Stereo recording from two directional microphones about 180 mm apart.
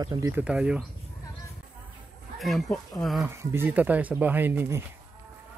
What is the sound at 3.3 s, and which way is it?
Speech, 15° right (ahead or behind).